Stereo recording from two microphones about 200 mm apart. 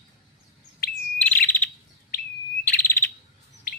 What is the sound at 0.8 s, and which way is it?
Bird, 50° left (ahead or behind).